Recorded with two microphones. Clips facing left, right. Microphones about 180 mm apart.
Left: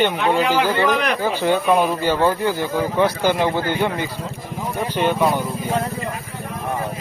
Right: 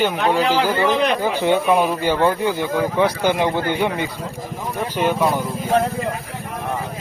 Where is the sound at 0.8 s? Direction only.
25° right (ahead or behind).